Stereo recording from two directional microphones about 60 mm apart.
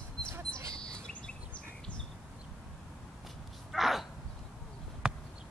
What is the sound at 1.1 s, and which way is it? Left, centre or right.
Bird, centre.